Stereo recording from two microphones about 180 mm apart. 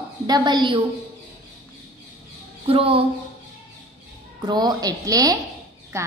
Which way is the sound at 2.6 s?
30° right (ahead or behind).